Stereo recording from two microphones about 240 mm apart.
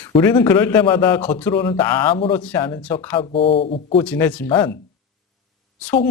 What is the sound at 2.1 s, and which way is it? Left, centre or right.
A man's voice, left.